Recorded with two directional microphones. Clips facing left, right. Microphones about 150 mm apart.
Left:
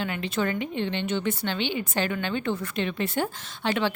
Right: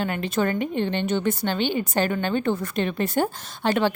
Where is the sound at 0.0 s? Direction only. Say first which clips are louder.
Right 4 dB; 45° right (ahead or behind).